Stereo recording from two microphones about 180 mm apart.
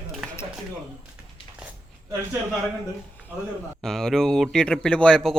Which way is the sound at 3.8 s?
5° left (ahead or behind).